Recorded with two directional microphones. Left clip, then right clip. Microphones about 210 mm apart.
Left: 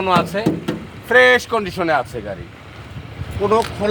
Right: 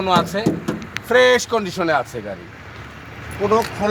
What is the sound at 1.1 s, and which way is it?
Speech, 35° right (ahead or behind).